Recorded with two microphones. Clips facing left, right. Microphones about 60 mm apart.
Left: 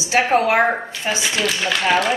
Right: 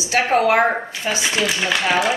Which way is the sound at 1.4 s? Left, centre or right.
Centre.